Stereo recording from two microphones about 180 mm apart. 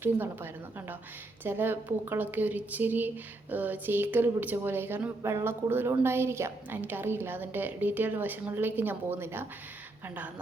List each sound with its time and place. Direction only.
0.0 s a woman's voice: 10° right (ahead or behind)